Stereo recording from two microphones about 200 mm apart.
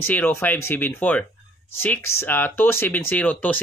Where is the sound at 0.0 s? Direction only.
10° left (ahead or behind).